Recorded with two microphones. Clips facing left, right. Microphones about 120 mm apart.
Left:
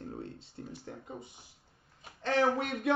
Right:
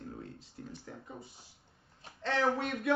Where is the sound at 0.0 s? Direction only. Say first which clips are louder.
Left 3 dB; 30° left (ahead or behind).